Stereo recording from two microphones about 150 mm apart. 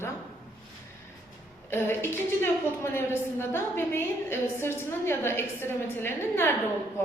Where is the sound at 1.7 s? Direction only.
15° left (ahead or behind).